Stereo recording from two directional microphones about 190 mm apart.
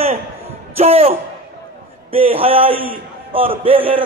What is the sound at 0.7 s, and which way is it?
A man's voice, 30° right (ahead or behind).